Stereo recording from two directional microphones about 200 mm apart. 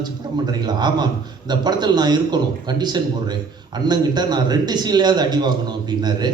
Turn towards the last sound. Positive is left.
turn(degrees=-20)  # may be behind; listen again after turning